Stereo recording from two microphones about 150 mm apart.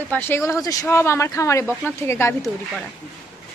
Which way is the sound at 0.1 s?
15° left (ahead or behind).